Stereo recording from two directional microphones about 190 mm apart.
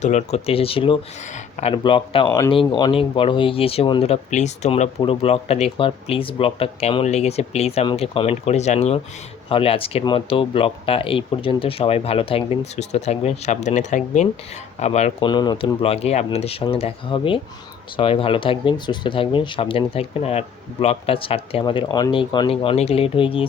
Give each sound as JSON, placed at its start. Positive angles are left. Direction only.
{"t": 0.0, "sound": "speech", "side_deg": 35}
{"t": 2.2, "sound": "speech", "side_deg": 15}
{"t": 15.3, "sound": "speech", "side_deg": 25}